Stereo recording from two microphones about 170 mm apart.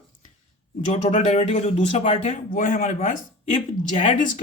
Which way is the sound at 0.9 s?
45° left (ahead or behind).